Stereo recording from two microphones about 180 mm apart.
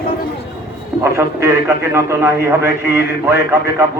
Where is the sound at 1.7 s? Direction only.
15° right (ahead or behind).